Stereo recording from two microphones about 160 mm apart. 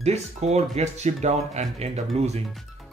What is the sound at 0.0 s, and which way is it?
Speech, 45° right (ahead or behind).